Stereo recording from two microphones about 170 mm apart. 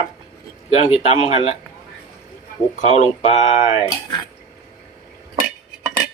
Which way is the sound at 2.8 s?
40° left (ahead or behind).